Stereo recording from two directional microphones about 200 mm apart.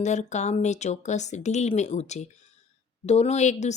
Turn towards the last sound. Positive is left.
turn(degrees=35)  # may be behind; listen again after turning